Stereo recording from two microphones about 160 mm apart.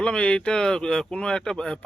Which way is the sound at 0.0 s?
5° left (ahead or behind).